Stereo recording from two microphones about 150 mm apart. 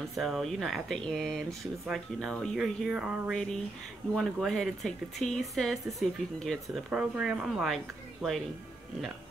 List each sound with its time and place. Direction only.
0.1 s speech: centre (ahead or behind)